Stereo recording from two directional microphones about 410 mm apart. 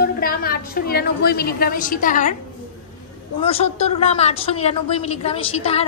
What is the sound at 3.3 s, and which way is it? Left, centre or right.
A woman's voice, centre.